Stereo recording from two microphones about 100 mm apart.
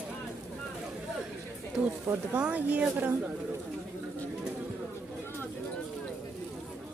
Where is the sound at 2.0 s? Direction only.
15° right (ahead or behind).